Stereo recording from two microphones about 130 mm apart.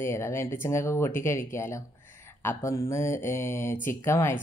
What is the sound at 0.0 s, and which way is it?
Speech, 20° left (ahead or behind).